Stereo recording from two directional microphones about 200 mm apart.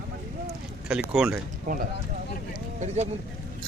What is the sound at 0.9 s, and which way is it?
Speech, 5° right (ahead or behind).